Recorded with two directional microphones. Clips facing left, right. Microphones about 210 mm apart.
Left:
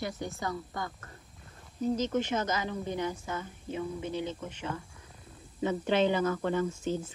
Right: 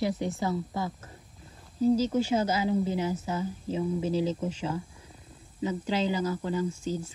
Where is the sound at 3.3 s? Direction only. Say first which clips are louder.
Right 5 dB; 30° right (ahead or behind).